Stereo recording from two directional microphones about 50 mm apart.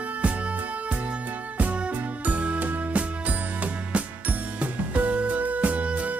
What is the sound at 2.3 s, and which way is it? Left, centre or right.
Music, right.